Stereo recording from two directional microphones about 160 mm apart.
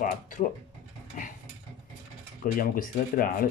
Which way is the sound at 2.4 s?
60° left (ahead or behind).